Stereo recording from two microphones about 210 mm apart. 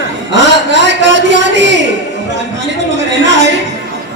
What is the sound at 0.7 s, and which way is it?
A woman's voice, 55° right (ahead or behind).